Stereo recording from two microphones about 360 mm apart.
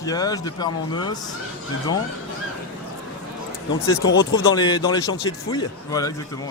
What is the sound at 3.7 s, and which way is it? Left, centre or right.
Speech, left.